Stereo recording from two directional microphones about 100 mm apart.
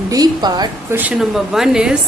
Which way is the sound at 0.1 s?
40° right (ahead or behind).